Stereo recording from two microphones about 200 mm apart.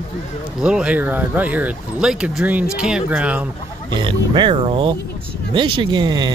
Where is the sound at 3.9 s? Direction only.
25° right (ahead or behind).